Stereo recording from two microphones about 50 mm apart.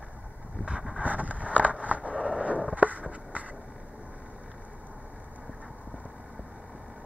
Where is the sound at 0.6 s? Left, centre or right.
Right.